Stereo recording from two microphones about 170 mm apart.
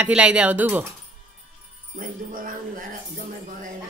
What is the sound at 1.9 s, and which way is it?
Speech, 55° right (ahead or behind).